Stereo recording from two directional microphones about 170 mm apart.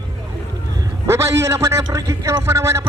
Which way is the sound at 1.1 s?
15° right (ahead or behind).